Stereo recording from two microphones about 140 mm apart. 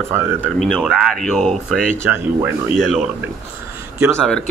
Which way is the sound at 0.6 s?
5° left (ahead or behind).